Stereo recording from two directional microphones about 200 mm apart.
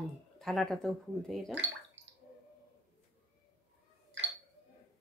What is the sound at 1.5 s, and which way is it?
Bathtub, 65° right (ahead or behind).